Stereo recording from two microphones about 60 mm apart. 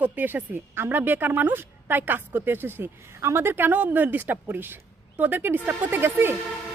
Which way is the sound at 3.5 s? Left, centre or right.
Right.